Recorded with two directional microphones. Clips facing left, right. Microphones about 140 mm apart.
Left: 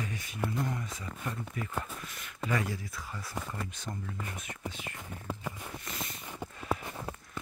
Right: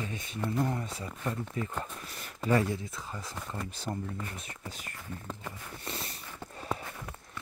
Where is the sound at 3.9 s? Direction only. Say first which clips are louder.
Right 8 dB; 30° right (ahead or behind).